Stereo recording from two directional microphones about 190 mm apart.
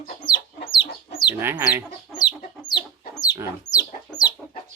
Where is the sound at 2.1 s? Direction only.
20° left (ahead or behind).